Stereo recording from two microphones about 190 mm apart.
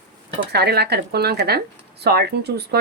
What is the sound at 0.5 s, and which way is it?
Speech, 55° right (ahead or behind).